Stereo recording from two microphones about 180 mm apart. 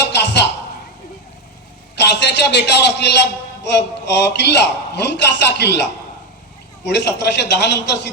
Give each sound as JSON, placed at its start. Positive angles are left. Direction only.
{"t": 0.1, "sound": "a sound", "side_deg": 70}
{"t": 2.0, "sound": "a man's voice", "side_deg": 75}
{"t": 6.8, "sound": "a man's voice", "side_deg": 70}